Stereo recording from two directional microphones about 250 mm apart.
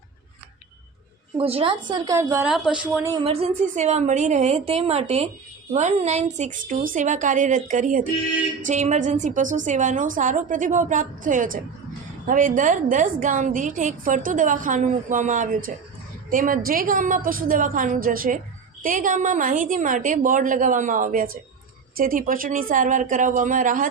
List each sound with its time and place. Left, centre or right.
1.4 s a woman's voice: right
3.2 s a woman's voice: right